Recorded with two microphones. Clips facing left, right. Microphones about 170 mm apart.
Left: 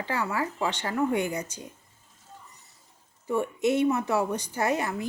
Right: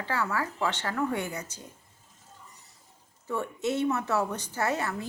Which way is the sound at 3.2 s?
15° left (ahead or behind).